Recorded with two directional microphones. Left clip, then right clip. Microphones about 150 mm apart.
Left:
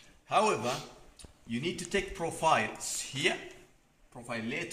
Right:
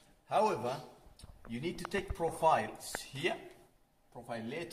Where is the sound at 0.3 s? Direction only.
50° right (ahead or behind).